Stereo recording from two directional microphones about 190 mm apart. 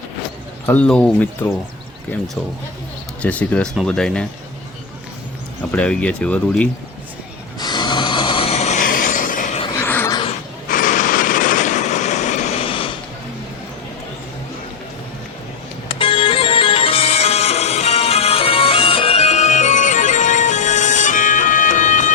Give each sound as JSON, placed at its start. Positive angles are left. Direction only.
{"t": 0.6, "sound": "speech", "side_deg": 10}
{"t": 3.2, "sound": "speech", "side_deg": 5}
{"t": 5.7, "sound": "speech", "side_deg": 5}
{"t": 7.6, "sound": "a sound", "side_deg": 20}
{"t": 9.7, "sound": "a sound", "side_deg": 10}
{"t": 10.7, "sound": "vehicle", "side_deg": 45}
{"t": 15.9, "sound": "music", "side_deg": 30}